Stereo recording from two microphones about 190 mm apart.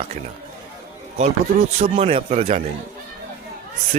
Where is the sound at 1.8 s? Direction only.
30° right (ahead or behind).